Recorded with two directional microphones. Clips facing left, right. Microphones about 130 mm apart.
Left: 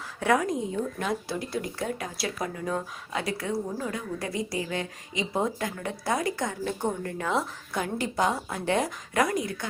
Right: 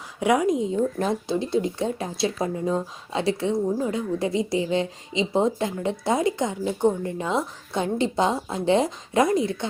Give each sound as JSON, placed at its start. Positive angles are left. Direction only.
{"t": 0.2, "sound": "speech", "side_deg": -15}